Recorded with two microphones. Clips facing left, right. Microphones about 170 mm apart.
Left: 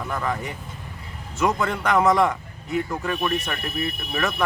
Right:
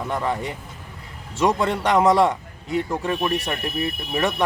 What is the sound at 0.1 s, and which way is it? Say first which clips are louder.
Speech: right 2 dB; 30° right (ahead or behind).